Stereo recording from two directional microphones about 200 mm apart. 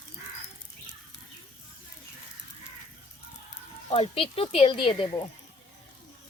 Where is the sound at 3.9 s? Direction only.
25° left (ahead or behind).